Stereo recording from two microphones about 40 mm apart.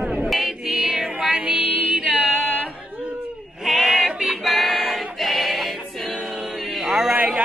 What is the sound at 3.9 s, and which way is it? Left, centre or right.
Music, centre.